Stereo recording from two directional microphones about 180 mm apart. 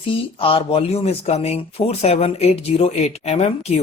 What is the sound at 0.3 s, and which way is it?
Speech, 30° left (ahead or behind).